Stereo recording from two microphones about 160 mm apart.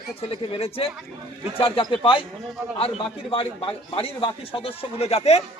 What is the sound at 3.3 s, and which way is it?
Speech, 35° left (ahead or behind).